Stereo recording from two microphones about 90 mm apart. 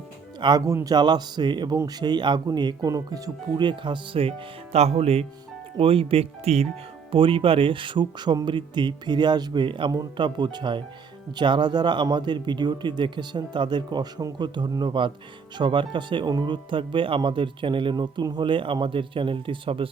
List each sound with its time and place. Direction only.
0.3 s speech: 55° right (ahead or behind)
0.6 s speech: 35° right (ahead or behind)
0.9 s speech: 55° right (ahead or behind)
3.6 s speech: 60° right (ahead or behind); by 4.4 s 85° right
5.7 s speech: 90° right; by 17.9 s 70° right (ahead or behind)
17.9 s speech: 50° right (ahead or behind); by 19.9 s 75° right (ahead or behind)